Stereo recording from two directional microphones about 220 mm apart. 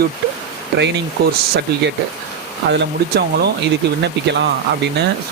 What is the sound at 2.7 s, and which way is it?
Speech, 50° right (ahead or behind).